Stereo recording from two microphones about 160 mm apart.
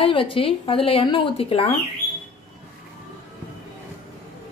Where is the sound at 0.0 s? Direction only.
35° left (ahead or behind).